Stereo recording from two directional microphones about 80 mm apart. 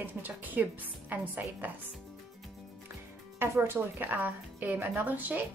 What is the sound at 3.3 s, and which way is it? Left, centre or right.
Speech, right.